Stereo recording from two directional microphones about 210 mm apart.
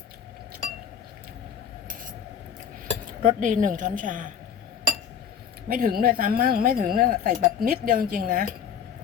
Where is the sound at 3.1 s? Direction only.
35° right (ahead or behind).